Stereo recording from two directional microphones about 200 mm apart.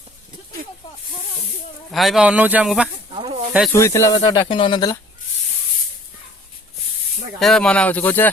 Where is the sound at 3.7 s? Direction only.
15° left (ahead or behind).